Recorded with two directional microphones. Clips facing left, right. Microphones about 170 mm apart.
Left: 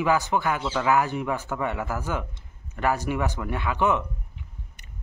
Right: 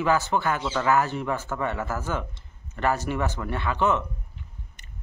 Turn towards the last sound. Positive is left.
turn(degrees=15)  # may be behind; listen again after turning